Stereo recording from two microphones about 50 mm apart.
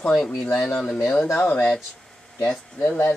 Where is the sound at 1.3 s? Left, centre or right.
Left.